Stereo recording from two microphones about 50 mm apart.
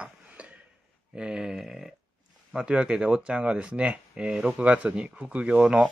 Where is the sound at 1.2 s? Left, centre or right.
Centre.